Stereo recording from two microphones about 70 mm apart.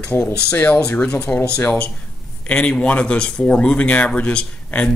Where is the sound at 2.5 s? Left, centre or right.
Centre.